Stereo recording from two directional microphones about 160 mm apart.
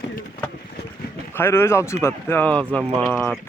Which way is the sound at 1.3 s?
15° left (ahead or behind).